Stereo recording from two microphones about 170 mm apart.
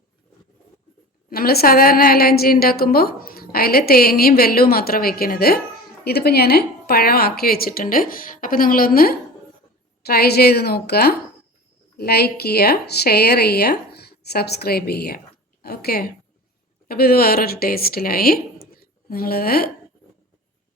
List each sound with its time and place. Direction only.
1.3 s a woman's voice: 65° left (ahead or behind)